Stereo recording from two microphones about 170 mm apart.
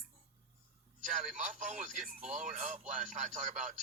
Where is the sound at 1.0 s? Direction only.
50° right (ahead or behind).